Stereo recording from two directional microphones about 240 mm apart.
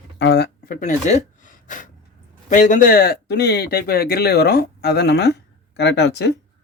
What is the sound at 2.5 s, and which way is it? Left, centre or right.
Speech, left.